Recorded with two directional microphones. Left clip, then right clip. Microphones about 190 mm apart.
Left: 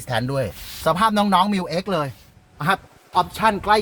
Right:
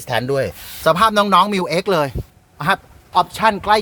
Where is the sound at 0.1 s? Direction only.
30° right (ahead or behind).